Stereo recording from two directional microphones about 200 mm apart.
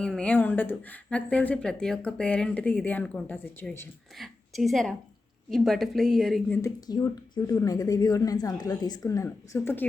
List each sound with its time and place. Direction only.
0.0 s a woman's voice: 5° left (ahead or behind)
6.6 s speech: 20° left (ahead or behind)